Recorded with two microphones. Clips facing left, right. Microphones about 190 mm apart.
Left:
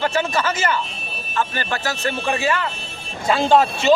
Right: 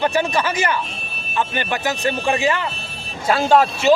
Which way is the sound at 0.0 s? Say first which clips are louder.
Right 2 dB; 15° right (ahead or behind).